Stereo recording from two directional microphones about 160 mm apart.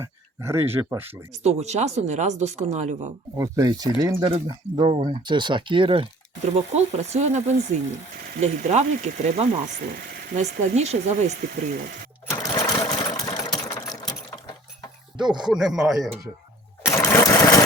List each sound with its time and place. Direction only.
0.0 s speech: 15° right (ahead or behind)
1.5 s speech: 45° right (ahead or behind)
3.3 s speech: 20° right (ahead or behind)
6.5 s speech: 45° right (ahead or behind)
12.3 s sewing machine: 20° left (ahead or behind)
13.7 s engine: 20° left (ahead or behind)
15.4 s speech: 5° right (ahead or behind)
16.8 s a sound: 15° left (ahead or behind)